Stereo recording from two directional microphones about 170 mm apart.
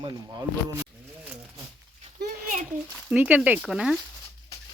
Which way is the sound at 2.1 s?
50° right (ahead or behind).